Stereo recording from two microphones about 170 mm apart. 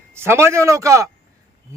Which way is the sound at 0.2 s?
15° right (ahead or behind).